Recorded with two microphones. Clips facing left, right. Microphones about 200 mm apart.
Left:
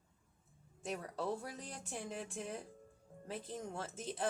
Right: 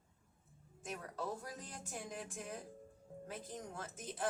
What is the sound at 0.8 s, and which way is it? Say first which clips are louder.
Speech: left 3 dB; 30° left (ahead or behind).